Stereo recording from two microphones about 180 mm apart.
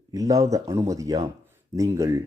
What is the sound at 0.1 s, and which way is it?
Speech, 20° right (ahead or behind).